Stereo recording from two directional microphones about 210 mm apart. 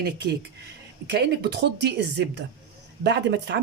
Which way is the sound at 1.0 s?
50° right (ahead or behind).